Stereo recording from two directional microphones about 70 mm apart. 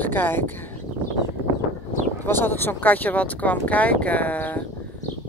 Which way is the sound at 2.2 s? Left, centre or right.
Left.